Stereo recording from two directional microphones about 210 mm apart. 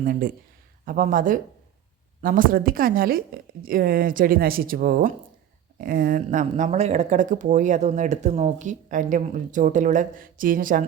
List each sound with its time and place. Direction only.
0.0 s a woman's voice: 40° right (ahead or behind)